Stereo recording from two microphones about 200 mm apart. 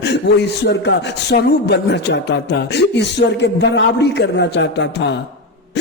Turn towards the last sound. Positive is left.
turn(degrees=60)  # may be behind; listen again after turning